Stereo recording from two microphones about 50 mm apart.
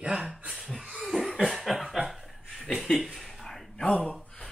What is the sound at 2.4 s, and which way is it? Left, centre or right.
Chuckle, centre.